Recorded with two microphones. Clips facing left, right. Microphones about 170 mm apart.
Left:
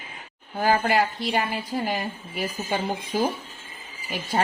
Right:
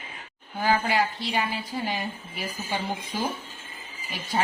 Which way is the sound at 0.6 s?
55° left (ahead or behind).